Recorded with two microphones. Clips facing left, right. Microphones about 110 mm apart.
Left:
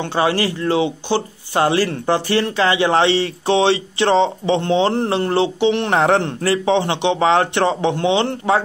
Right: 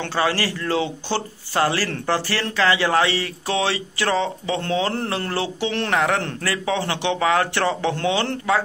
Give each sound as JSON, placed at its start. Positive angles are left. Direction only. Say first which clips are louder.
{"t": 0.0, "sound": "speech", "louder": "left 4 dB", "side_deg": 20}